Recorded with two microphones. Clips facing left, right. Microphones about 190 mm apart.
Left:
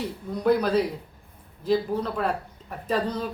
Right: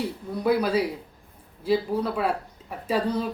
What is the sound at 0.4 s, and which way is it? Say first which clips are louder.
Speech: left 1 dB; 5° right (ahead or behind).